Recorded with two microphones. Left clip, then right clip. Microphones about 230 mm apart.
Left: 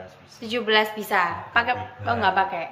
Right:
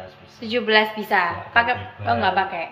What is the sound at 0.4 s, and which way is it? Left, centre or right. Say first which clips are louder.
A woman's voice: right 3 dB; centre.